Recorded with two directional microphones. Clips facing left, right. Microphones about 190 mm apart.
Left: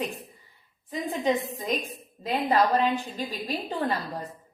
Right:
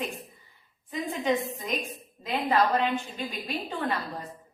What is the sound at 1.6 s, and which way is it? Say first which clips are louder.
A woman's voice: left 3 dB; 40° left (ahead or behind).